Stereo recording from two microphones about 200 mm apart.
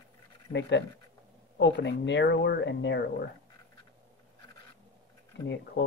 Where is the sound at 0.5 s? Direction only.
60° left (ahead or behind).